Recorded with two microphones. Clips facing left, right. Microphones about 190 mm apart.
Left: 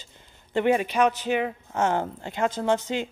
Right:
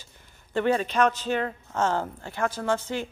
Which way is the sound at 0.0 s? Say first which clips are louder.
Left 2 dB; 20° left (ahead or behind).